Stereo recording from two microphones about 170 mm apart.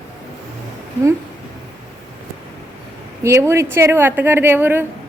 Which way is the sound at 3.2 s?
15° right (ahead or behind).